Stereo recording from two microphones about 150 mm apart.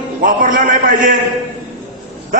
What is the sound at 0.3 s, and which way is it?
Speech, 60° right (ahead or behind).